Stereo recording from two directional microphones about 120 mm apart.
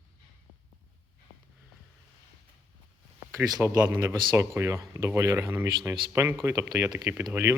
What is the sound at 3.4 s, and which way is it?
Speech, 30° right (ahead or behind).